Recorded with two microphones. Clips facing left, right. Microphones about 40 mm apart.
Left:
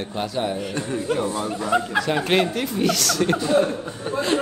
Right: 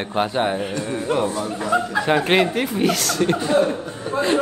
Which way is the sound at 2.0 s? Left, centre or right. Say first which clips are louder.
Right 5 dB; right.